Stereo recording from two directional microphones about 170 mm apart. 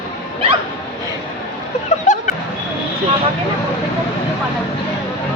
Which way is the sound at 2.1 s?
45° left (ahead or behind).